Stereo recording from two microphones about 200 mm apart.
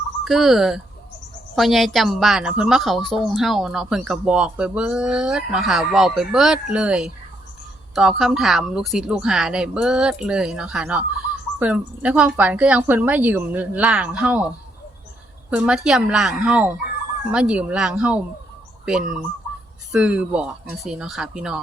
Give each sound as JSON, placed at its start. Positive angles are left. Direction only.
{"t": 0.3, "sound": "a woman's voice", "side_deg": 0}
{"t": 15.4, "sound": "speech", "side_deg": -5}